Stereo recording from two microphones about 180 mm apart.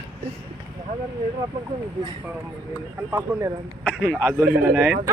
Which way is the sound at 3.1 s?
20° right (ahead or behind).